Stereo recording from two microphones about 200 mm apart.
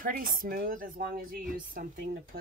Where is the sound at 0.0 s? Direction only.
45° right (ahead or behind).